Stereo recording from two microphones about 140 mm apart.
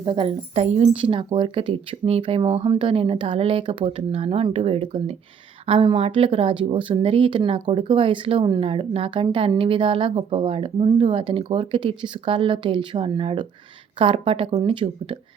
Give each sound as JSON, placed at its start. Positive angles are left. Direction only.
{"t": 0.0, "sound": "speech", "side_deg": -35}
{"t": 0.5, "sound": "speech", "side_deg": -50}